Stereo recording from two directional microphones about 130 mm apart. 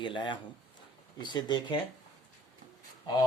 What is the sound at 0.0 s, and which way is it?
Speech, 40° left (ahead or behind).